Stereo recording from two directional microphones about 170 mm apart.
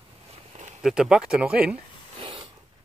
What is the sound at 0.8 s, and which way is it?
Speech, 5° right (ahead or behind).